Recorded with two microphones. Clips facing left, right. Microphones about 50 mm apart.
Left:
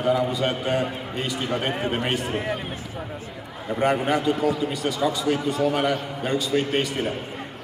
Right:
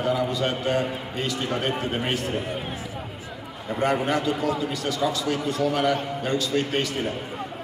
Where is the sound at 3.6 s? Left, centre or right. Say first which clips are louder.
Left 2 dB; centre.